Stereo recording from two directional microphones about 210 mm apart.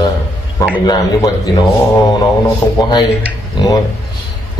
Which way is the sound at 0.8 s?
20° left (ahead or behind).